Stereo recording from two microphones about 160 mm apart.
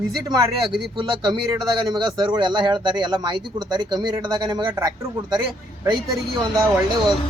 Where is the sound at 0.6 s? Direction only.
Centre (ahead or behind).